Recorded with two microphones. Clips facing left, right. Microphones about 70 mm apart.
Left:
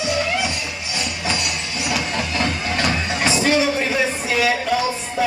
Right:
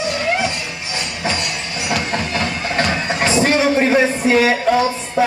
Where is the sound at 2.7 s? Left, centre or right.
Right.